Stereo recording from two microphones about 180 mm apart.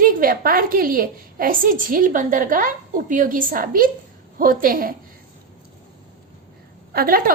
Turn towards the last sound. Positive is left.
turn(degrees=-55)  # may be behind; listen again after turning